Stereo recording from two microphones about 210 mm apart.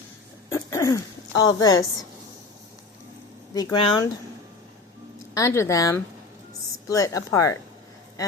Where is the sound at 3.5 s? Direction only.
20° left (ahead or behind).